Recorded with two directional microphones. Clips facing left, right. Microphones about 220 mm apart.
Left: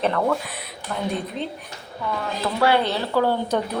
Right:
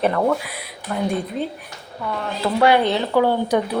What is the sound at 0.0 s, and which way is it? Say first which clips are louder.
A woman's voice: right 3 dB; 10° right (ahead or behind).